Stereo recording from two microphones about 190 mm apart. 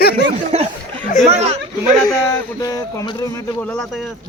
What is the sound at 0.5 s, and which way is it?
Speech, 35° right (ahead or behind).